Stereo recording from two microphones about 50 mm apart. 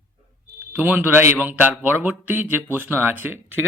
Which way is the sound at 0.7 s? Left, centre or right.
Right.